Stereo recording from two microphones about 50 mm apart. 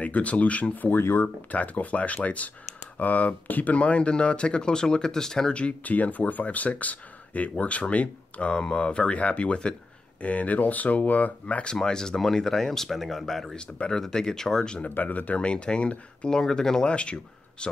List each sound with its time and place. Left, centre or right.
0.0 s speech: left; by 5.5 s centre
5.5 s speech: left
11.6 s speech: centre
13.5 s speech: centre
14.9 s speech: left
16.3 s speech: centre